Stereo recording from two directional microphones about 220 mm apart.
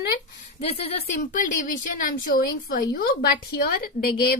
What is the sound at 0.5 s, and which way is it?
A woman's voice, 30° left (ahead or behind).